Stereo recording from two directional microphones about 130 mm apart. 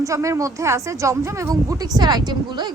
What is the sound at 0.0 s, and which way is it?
A woman's voice, 25° right (ahead or behind).